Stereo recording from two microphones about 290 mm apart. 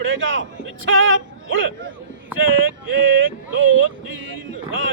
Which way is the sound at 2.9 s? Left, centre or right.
Right.